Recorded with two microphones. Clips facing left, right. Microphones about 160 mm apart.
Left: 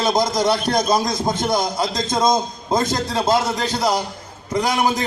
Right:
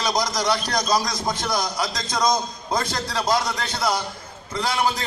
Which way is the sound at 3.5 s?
40° left (ahead or behind).